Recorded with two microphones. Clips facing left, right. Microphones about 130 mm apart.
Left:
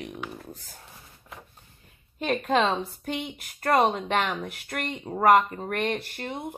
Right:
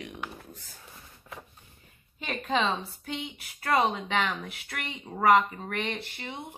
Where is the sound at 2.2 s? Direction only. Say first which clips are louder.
Left 5 dB; 50° left (ahead or behind).